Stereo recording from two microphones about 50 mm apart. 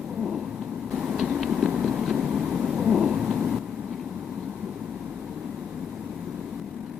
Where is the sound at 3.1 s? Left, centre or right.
Right.